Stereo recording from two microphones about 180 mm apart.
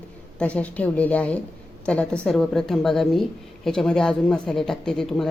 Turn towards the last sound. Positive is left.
turn(degrees=0)  # may be behind; listen again after turning